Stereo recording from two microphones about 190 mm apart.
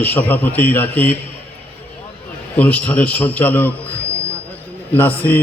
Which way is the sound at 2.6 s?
10° left (ahead or behind).